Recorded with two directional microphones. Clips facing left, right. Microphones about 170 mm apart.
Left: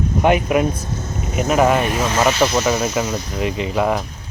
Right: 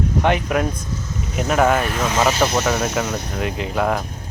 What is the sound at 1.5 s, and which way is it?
Speech, centre (ahead or behind).